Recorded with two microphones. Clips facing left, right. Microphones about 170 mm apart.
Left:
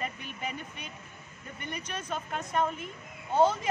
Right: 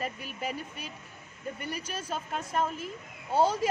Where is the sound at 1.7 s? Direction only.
10° right (ahead or behind).